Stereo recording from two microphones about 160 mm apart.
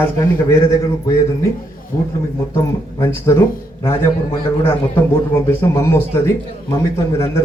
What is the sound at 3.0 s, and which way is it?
A man's voice, 15° left (ahead or behind).